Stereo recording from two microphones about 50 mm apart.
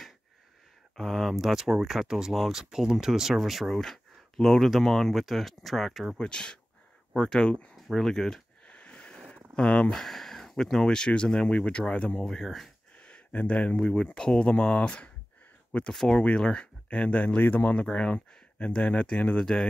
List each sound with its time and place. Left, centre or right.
0.9 s speech: centre
1.3 s speech: centre
6.1 s speech: centre
8.6 s a sound: left
9.6 s speech: centre
9.9 s speech: centre; by 12.3 s left
12.3 s speech: centre
13.0 s a sound: left
13.7 s speech: centre
15.9 s speech: centre
16.3 s speech: centre
17.4 s speech: left
17.7 s speech: left
19.4 s speech: centre